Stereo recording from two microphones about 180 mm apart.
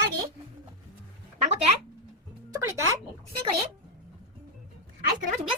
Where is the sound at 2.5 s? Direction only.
15° right (ahead or behind).